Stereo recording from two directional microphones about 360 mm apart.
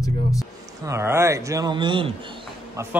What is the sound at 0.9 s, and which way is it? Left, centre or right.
Speech, centre.